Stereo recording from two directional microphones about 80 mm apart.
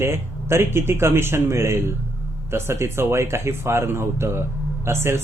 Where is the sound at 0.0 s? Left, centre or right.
Right.